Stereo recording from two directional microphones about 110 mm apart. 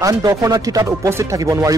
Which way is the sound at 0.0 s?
30° right (ahead or behind).